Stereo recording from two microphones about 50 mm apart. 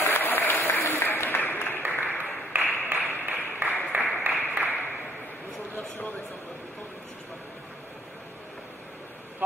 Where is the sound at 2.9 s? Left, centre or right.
Right.